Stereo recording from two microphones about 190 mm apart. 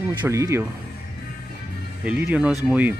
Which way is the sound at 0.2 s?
15° right (ahead or behind).